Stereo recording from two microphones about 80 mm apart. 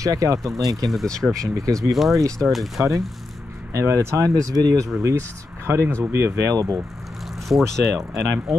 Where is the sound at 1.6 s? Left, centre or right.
Right.